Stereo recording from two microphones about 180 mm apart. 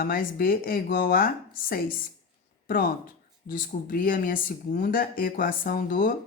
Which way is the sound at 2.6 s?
50° left (ahead or behind).